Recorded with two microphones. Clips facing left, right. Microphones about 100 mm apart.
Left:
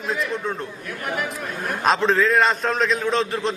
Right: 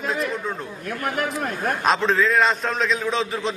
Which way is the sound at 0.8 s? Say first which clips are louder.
Right 3 dB; 50° right (ahead or behind).